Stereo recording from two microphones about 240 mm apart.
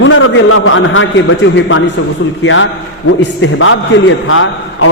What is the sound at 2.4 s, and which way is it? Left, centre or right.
A man's voice, left.